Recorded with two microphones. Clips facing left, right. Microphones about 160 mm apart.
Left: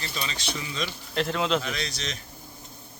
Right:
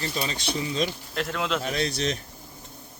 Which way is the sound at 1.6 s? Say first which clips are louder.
Right 6 dB; 50° right (ahead or behind).